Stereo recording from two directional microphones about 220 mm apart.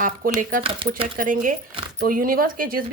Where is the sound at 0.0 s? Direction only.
40° right (ahead or behind).